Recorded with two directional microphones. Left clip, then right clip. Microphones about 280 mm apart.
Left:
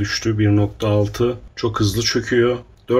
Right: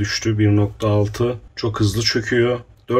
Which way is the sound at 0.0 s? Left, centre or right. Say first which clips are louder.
Even; centre.